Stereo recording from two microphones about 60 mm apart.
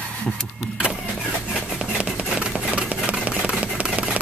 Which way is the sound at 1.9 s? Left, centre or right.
Centre.